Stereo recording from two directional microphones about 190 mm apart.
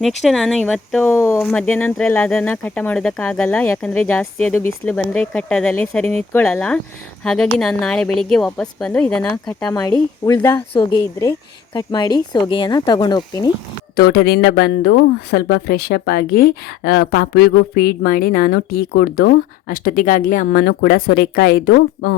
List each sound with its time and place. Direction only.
0.2 s a woman's voice: centre (ahead or behind)
10.2 s speech: 15° left (ahead or behind)
13.9 s speech: 55° left (ahead or behind)